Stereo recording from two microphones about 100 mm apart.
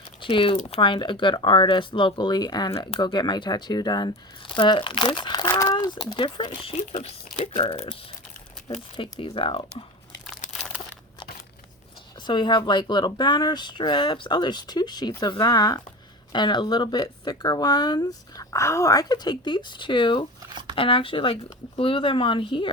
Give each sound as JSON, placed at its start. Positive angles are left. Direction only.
{"t": 0.2, "sound": "speech", "side_deg": 60}
{"t": 4.5, "sound": "speech", "side_deg": 55}
{"t": 5.5, "sound": "speech", "side_deg": 35}
{"t": 9.0, "sound": "speech", "side_deg": 60}
{"t": 10.2, "sound": "crumpling", "side_deg": 0}
{"t": 12.2, "sound": "speech", "side_deg": 50}